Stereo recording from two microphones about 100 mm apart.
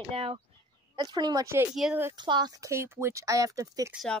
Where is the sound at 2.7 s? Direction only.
25° right (ahead or behind).